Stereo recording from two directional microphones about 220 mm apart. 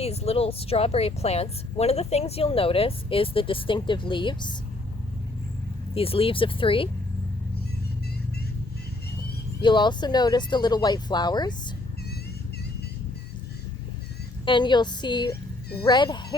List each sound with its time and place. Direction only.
0.0 s speech: 25° left (ahead or behind)
5.9 s speech: 25° left (ahead or behind)
9.6 s speech: 20° left (ahead or behind)
14.4 s speech: 20° left (ahead or behind)